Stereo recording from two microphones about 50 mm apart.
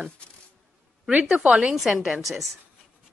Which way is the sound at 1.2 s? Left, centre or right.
Centre.